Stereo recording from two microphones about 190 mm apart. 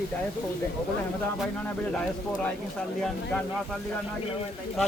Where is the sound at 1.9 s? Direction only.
5° left (ahead or behind).